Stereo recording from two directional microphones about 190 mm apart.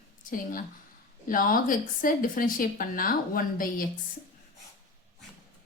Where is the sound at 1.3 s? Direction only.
45° left (ahead or behind).